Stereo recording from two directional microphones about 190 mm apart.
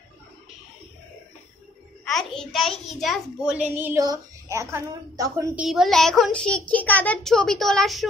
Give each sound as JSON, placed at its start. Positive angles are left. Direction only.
{"t": 2.0, "sound": "a child's voice", "side_deg": 0}
{"t": 3.7, "sound": "a woman's voice", "side_deg": -15}
{"t": 5.6, "sound": "a child's voice", "side_deg": 0}